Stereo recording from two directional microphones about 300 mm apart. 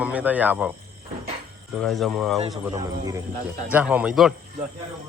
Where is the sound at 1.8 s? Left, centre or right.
Centre.